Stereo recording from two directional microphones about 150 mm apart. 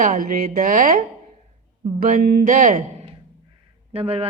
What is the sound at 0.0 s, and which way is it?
Speech, 65° right (ahead or behind).